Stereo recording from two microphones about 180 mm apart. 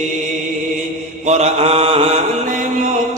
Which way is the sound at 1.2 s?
40° right (ahead or behind).